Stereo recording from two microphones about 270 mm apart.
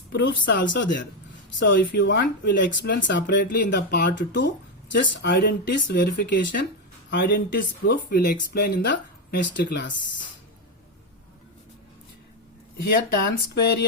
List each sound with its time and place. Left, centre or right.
0.1 s speech: left
12.8 s speech: left